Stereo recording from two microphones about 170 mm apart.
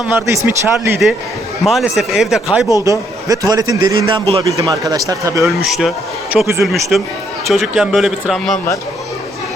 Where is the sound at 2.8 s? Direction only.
20° right (ahead or behind).